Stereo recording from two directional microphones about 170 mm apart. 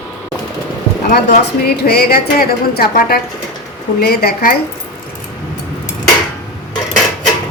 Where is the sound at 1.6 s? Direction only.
70° left (ahead or behind).